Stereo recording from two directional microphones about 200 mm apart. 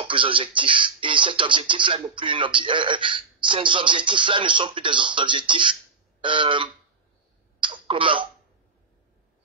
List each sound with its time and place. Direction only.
0.0 s speech: 25° right (ahead or behind)